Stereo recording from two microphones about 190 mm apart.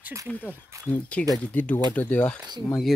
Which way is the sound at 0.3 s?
10° left (ahead or behind).